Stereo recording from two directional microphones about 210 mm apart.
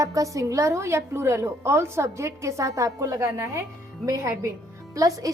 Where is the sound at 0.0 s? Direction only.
15° right (ahead or behind).